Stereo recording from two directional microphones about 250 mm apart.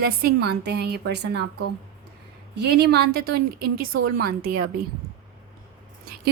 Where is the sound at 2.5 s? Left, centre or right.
Right.